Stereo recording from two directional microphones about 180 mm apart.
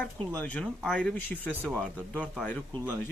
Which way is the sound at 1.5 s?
10° right (ahead or behind).